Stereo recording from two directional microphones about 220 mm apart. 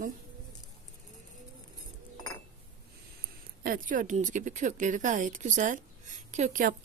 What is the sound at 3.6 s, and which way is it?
A woman's voice, 40° right (ahead or behind).